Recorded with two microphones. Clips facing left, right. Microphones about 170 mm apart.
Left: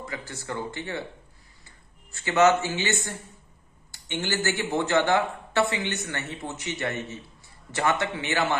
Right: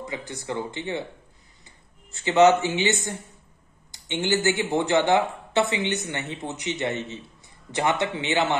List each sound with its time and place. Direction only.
0.0 s speech: 20° right (ahead or behind)
2.0 s speech: 20° right (ahead or behind)